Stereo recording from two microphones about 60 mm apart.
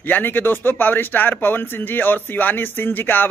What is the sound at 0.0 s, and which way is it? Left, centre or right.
Speech, left.